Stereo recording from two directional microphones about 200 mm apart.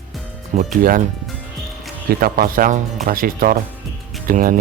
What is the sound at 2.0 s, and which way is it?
Speech, 45° right (ahead or behind).